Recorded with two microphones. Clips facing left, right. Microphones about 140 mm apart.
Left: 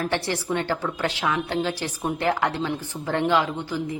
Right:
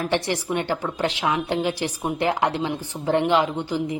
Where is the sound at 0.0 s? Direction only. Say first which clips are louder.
Right 2 dB; 15° right (ahead or behind).